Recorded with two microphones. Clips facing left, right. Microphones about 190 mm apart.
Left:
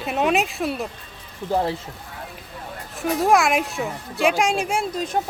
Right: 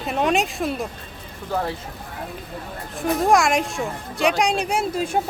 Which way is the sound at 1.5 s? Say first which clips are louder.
Left 3 dB; 25° left (ahead or behind).